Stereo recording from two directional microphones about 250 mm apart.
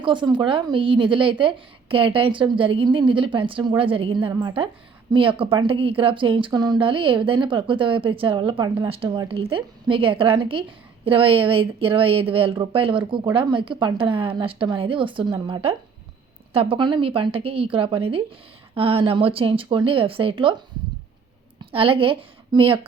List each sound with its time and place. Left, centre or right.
0.0 s a woman's voice: centre
21.6 s a woman's voice: right